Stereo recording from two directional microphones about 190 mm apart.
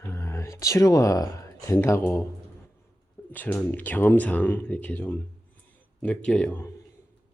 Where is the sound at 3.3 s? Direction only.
10° left (ahead or behind).